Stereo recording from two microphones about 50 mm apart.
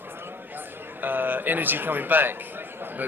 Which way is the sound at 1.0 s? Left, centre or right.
Right.